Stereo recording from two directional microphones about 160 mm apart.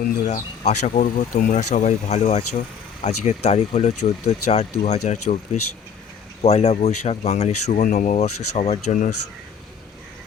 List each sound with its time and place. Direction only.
0.0 s speech: 50° left (ahead or behind)
6.4 s speech: 40° left (ahead or behind)